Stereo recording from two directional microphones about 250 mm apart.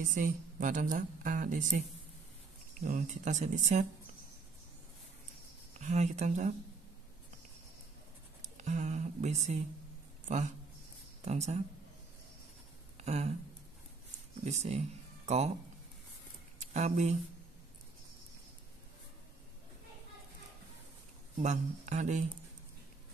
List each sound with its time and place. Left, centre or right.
0.0 s a woman's voice: right
5.8 s speech: right
8.4 s speech: right
13.0 s a sound: right
14.4 s speech: right
16.7 s speech: right
21.4 s speech: right